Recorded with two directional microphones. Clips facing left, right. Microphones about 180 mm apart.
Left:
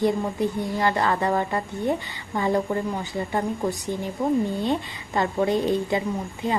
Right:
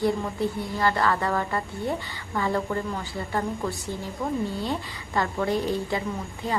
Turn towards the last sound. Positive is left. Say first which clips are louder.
# left 3 dB
turn(degrees=20)  # may be behind; listen again after turning